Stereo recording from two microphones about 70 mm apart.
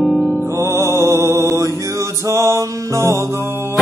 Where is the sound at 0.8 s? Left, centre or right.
Right.